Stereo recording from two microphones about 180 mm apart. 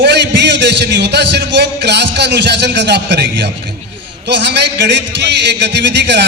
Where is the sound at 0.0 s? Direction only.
70° right (ahead or behind).